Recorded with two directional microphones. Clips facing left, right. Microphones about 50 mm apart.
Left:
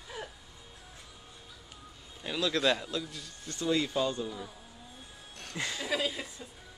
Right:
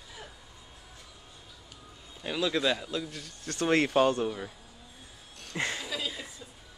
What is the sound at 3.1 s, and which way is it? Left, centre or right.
Speech, right.